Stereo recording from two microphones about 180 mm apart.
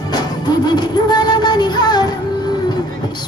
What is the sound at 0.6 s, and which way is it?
Music, 25° left (ahead or behind).